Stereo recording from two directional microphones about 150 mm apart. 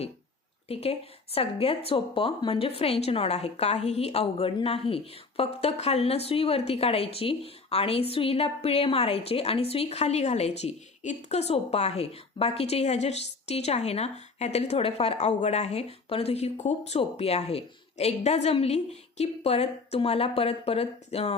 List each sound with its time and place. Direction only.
0.7 s a woman's voice: 40° left (ahead or behind)